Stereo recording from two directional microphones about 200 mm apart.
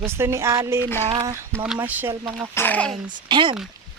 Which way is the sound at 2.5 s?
10° left (ahead or behind).